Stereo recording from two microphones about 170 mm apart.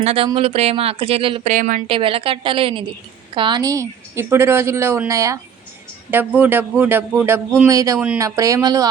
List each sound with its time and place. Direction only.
0.0 s speech: 35° right (ahead or behind)
1.5 s a woman's voice: 50° right (ahead or behind)
1.9 s a woman's voice: 30° right (ahead or behind)
7.9 s a woman's voice: 5° right (ahead or behind)
8.2 s speech: 20° right (ahead or behind)